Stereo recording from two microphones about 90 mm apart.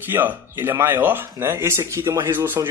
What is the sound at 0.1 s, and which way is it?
Speech, 25° right (ahead or behind).